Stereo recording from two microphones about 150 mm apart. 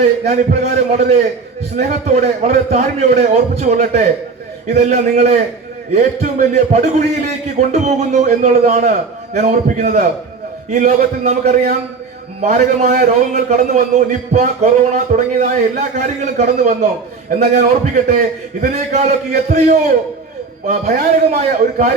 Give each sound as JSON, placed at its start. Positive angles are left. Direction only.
{"t": 0.0, "sound": "a man's voice", "side_deg": -50}